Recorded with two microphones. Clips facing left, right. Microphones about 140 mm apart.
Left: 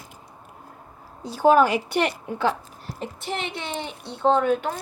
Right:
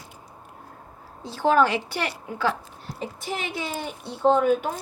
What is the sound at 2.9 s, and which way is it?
Speech, centre (ahead or behind).